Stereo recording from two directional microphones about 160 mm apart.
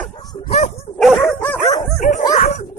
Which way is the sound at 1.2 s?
15° left (ahead or behind).